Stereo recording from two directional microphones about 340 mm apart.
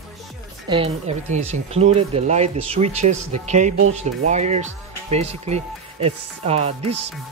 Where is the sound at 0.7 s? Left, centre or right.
Centre.